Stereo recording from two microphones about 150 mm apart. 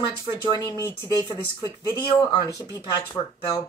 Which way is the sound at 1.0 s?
25° right (ahead or behind).